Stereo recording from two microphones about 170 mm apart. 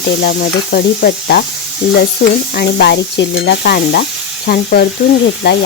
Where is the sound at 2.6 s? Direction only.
75° left (ahead or behind).